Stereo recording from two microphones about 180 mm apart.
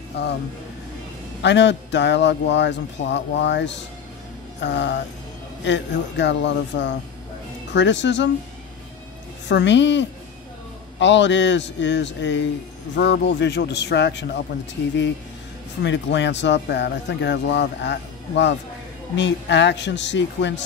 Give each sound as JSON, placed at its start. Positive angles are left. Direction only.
{"t": 1.4, "sound": "a man's voice", "side_deg": 80}
{"t": 9.5, "sound": "a man's voice", "side_deg": 80}
{"t": 12.9, "sound": "speech", "side_deg": 75}
{"t": 15.8, "sound": "a man's voice", "side_deg": 80}